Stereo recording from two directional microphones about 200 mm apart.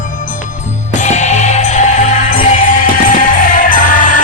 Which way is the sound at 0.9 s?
35° left (ahead or behind).